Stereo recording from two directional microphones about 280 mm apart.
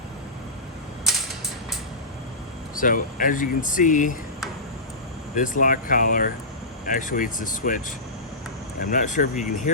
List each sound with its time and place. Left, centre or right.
2.7 s speech: left
5.3 s speech: left